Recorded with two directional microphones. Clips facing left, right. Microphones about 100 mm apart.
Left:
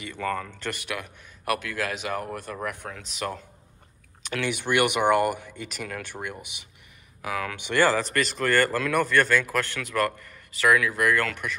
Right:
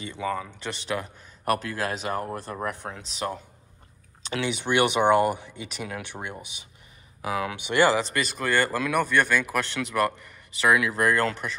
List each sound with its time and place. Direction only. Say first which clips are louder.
0.2 s speech: even; 10° right (ahead or behind); by 11.5 s 30° right (ahead or behind)